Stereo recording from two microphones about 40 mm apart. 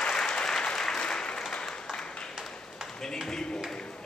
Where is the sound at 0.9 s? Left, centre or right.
Left.